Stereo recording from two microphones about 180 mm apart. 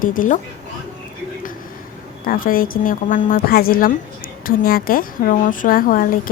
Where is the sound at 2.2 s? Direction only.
50° left (ahead or behind).